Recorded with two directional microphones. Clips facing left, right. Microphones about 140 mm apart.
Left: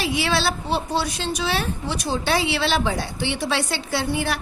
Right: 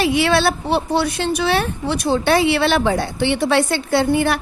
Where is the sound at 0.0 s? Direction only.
60° right (ahead or behind).